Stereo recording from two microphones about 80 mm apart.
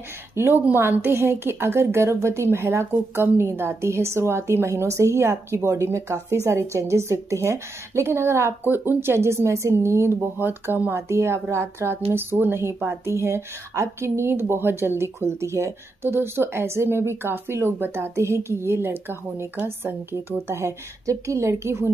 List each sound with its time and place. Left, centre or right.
0.4 s speech: right